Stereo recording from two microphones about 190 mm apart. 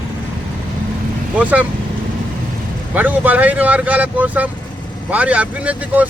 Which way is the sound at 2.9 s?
10° right (ahead or behind).